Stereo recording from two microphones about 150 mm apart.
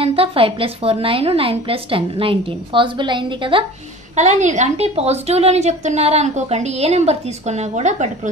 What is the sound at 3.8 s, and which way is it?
A woman's voice, 50° right (ahead or behind).